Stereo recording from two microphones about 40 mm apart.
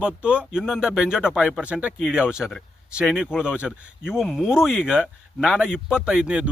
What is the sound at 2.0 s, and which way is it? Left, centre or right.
Speech, right.